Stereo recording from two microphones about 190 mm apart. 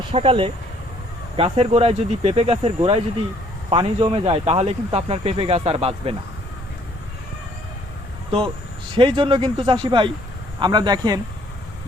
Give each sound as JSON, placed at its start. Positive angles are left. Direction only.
{"t": 0.1, "sound": "speech", "side_deg": -30}
{"t": 9.0, "sound": "speech", "side_deg": -30}